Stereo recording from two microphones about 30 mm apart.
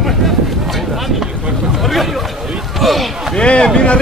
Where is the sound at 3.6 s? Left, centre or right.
Left.